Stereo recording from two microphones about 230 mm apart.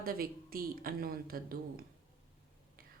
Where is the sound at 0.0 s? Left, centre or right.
Right.